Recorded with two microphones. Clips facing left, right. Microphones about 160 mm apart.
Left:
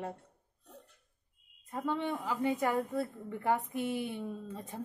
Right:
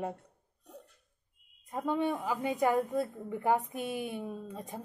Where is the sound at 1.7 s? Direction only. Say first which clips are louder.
Right 3 dB; 15° right (ahead or behind).